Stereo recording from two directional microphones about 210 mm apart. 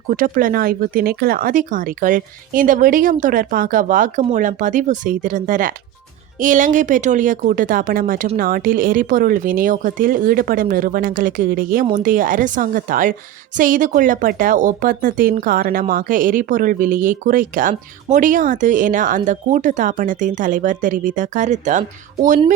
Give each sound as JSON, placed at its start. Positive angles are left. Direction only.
{"t": 0.1, "sound": "a woman's voice", "side_deg": -40}